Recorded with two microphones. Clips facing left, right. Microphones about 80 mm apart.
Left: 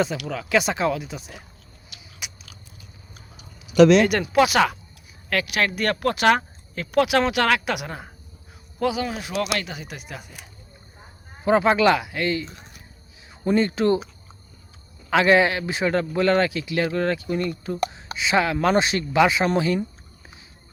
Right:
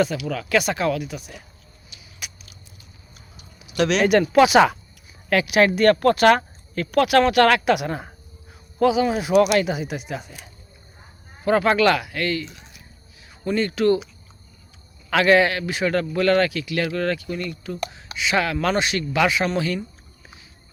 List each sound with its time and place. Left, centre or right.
0.3 s speech: centre
1.9 s a sound: left
4.2 s speech: centre
5.3 s speech: centre
5.7 s speech: centre
9.0 s speech: centre
11.4 s speech: centre
12.5 s a sound: left
13.4 s speech: left
15.1 s speech: left